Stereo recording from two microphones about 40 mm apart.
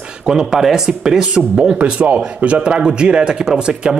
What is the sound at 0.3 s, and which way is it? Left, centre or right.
Speech, centre.